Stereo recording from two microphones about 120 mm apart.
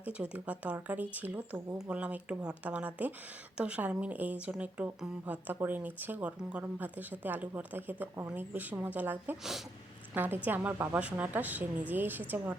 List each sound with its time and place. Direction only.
0.0 s a woman's voice: 10° right (ahead or behind)
9.4 s speech: 5° right (ahead or behind)
10.2 s a woman's voice: 15° right (ahead or behind)